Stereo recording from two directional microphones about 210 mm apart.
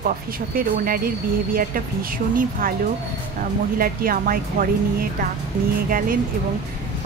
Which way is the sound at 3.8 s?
45° right (ahead or behind).